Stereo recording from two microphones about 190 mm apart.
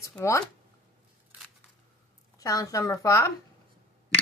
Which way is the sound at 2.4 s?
20° left (ahead or behind).